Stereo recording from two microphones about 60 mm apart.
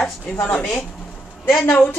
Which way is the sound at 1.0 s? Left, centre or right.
Centre.